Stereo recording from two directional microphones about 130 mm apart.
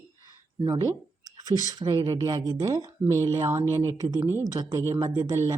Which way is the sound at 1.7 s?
35° right (ahead or behind).